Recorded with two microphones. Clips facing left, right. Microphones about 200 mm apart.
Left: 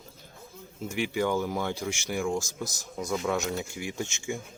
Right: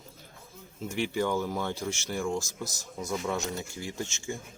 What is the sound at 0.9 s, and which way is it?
Speech, 10° left (ahead or behind).